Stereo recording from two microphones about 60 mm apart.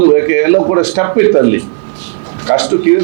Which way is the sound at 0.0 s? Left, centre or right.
Right.